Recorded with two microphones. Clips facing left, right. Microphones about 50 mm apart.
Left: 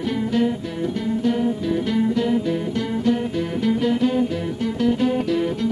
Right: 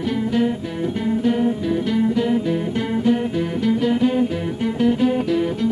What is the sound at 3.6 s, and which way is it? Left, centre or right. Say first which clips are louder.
Music: right 1 dB; centre.